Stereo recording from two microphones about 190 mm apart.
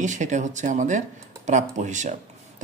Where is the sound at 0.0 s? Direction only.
40° right (ahead or behind).